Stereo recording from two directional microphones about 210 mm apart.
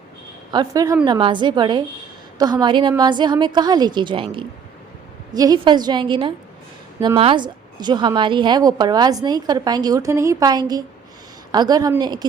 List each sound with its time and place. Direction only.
0.5 s a woman's voice: 20° right (ahead or behind)